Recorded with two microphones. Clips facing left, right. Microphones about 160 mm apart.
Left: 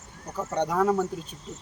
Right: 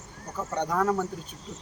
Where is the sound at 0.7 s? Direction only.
5° left (ahead or behind).